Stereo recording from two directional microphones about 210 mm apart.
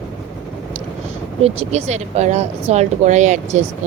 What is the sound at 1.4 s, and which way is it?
Speech, 30° right (ahead or behind).